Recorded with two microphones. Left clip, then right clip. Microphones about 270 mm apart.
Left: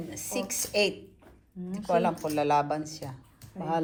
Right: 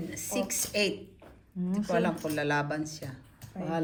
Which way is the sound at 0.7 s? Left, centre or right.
Centre.